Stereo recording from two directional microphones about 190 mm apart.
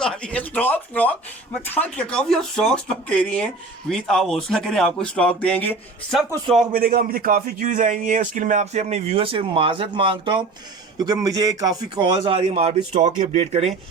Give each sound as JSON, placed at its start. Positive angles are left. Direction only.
{"t": 0.0, "sound": "speech", "side_deg": 5}
{"t": 6.7, "sound": "a man's voice", "side_deg": -50}